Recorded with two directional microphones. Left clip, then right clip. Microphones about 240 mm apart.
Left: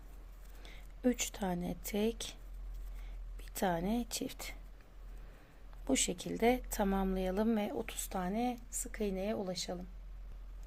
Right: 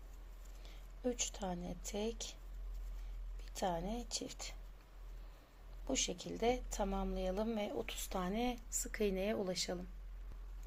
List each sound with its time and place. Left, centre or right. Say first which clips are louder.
0.6 s speech: left 6 dB; left
3.4 s a woman's voice: left 4 dB; left
5.9 s a woman's voice: left 4 dB; left; by 9.8 s centre